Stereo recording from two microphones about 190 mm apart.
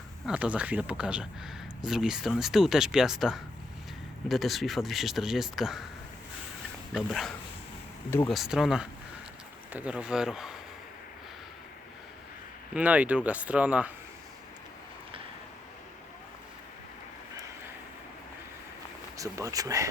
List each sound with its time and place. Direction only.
0.3 s speech: 5° right (ahead or behind)
6.9 s speech: centre (ahead or behind)
12.7 s speech: 5° right (ahead or behind)
19.1 s speech: 15° right (ahead or behind)